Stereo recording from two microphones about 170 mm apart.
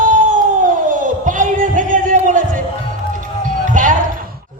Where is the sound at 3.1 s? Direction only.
50° right (ahead or behind).